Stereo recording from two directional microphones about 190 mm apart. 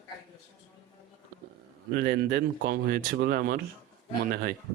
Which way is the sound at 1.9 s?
55° right (ahead or behind).